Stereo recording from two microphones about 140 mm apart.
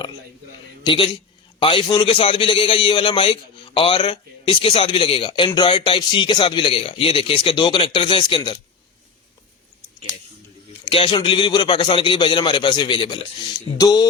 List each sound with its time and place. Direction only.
0.9 s a man's voice: 40° left (ahead or behind)
10.8 s a man's voice: 40° left (ahead or behind)
13.7 s music: 30° left (ahead or behind)